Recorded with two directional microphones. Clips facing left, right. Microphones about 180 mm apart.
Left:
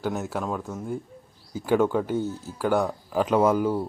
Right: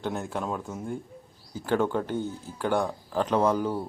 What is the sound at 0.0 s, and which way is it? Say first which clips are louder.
Speech: left 2 dB; 5° left (ahead or behind).